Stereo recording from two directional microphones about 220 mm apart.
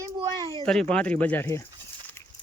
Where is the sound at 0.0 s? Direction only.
15° right (ahead or behind).